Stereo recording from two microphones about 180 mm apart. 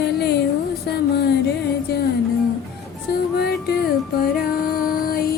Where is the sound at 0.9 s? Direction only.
60° left (ahead or behind).